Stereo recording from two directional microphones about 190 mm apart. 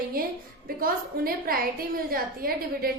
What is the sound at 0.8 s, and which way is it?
A woman's voice, 50° right (ahead or behind).